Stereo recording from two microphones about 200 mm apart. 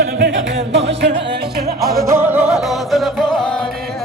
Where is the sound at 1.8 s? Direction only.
Centre (ahead or behind).